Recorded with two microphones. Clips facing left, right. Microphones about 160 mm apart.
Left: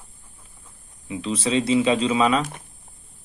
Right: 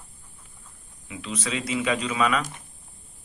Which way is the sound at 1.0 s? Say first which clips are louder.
Left 7 dB; 30° left (ahead or behind).